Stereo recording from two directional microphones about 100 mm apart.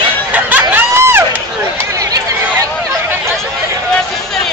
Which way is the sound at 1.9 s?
35° right (ahead or behind).